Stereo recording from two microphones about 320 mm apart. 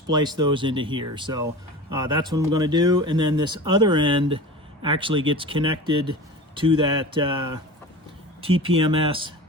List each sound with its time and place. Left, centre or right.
0.1 s speech: centre